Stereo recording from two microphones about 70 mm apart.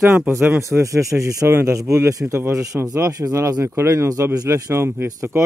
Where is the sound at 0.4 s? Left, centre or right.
Right.